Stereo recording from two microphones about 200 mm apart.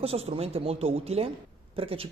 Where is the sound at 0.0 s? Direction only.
30° right (ahead or behind).